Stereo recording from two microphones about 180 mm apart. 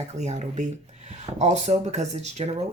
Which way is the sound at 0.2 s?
40° right (ahead or behind).